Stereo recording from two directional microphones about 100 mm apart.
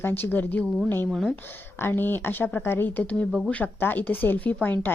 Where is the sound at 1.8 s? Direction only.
20° left (ahead or behind).